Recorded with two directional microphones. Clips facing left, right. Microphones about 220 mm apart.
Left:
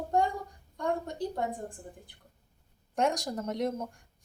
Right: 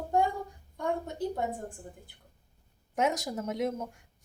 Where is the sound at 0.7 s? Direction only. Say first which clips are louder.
Left 1 dB; 5° right (ahead or behind).